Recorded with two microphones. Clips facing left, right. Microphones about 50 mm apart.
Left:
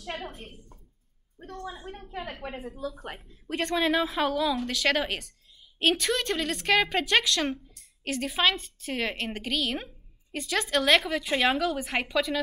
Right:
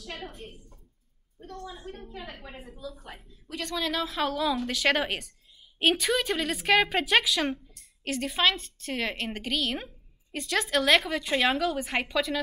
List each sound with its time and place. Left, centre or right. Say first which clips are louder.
0.0 s a woman's voice: left 3 dB; centre
2.0 s a woman's voice: left 4 dB; left
2.4 s a woman's voice: left 7 dB; left
3.3 s a woman's voice: left 6 dB; left
3.9 s speech: left 3 dB; centre